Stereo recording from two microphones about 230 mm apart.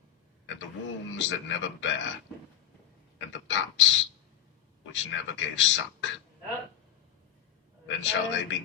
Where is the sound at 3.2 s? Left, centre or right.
Left.